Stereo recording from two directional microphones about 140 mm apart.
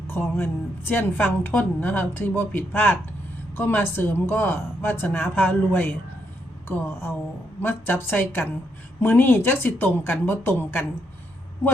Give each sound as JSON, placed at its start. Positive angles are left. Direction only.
{"t": 0.1, "sound": "a woman's voice", "side_deg": 15}